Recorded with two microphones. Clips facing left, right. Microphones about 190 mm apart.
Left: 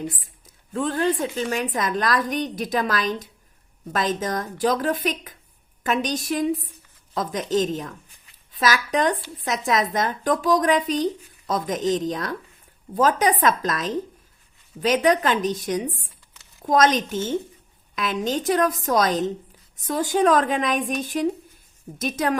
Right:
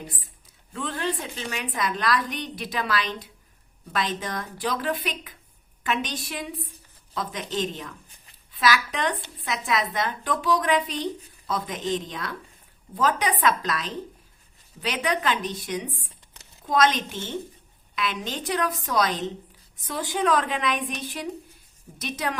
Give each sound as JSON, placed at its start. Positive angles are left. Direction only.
{"t": 0.7, "sound": "a woman's voice", "side_deg": 45}